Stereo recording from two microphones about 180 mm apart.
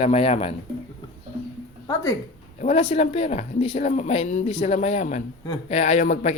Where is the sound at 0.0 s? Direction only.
35° left (ahead or behind).